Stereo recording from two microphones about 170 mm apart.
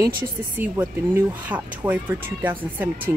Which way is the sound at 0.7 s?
10° right (ahead or behind).